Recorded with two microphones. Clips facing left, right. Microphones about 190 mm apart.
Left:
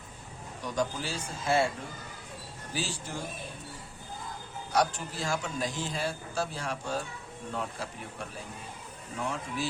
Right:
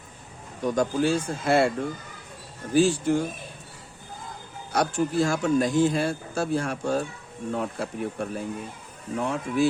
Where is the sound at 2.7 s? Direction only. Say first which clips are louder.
Right 16 dB; 55° right (ahead or behind).